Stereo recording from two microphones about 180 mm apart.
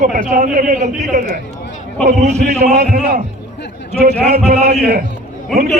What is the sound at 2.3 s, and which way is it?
Speech, 40° right (ahead or behind).